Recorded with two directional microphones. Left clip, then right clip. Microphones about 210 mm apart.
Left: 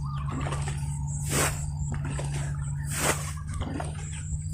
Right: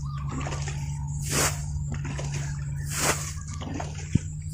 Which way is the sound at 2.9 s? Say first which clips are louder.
Right 1 dB; 25° right (ahead or behind).